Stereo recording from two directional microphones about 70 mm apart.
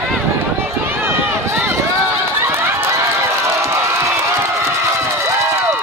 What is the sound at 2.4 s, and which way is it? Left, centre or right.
Run, right.